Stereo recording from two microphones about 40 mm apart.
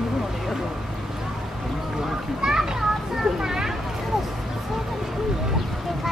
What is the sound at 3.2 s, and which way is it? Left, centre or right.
Vehicle, centre.